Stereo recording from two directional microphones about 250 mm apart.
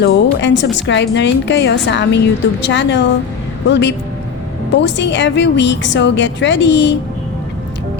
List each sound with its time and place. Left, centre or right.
0.0 s a woman's voice: left